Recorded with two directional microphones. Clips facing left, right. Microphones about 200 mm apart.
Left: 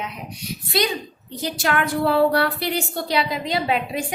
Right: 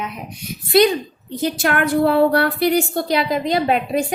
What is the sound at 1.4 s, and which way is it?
A woman's voice, 50° right (ahead or behind).